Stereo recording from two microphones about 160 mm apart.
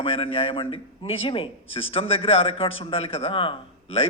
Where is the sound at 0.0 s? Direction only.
35° left (ahead or behind).